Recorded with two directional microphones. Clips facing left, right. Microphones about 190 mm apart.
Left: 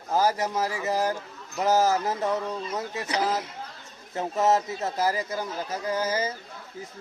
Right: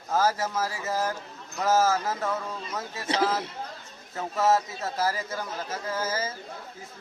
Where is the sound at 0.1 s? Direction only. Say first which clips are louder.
Left 1 dB; 15° left (ahead or behind).